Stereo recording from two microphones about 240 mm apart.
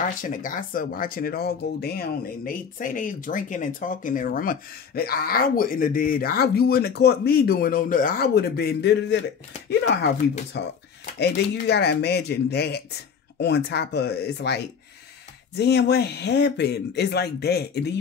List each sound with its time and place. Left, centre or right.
0.2 s speech: left
10.5 s speech: left